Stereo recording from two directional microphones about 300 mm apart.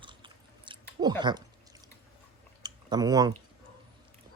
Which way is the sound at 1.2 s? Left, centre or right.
Centre.